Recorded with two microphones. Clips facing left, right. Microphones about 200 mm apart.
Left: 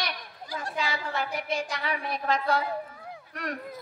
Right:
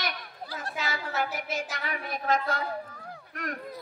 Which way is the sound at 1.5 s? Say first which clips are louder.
Left 3 dB; 50° right (ahead or behind).